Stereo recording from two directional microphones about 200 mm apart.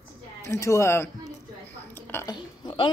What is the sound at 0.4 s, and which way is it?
Speech, 15° left (ahead or behind).